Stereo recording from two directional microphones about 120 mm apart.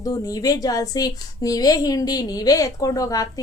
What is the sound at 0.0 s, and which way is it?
A woman's voice, 30° left (ahead or behind).